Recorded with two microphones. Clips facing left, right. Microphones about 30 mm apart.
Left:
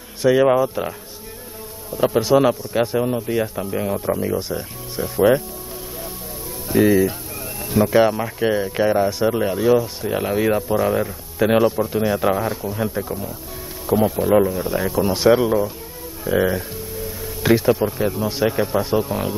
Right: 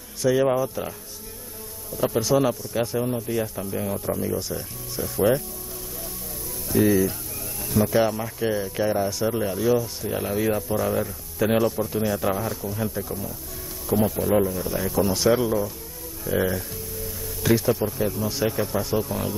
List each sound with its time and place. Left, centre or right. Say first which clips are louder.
0.2 s speech: left 6 dB; left
6.7 s speech: left 4 dB; left